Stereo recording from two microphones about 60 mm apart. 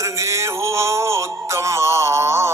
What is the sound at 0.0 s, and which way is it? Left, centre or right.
Music, right.